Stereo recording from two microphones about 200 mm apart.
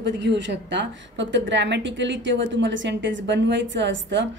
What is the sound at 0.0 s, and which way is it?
A woman's voice, 65° right (ahead or behind).